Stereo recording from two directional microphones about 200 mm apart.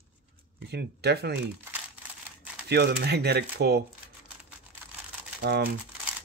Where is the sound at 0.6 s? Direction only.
55° right (ahead or behind).